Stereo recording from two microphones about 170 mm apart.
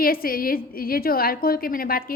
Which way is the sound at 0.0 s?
60° left (ahead or behind).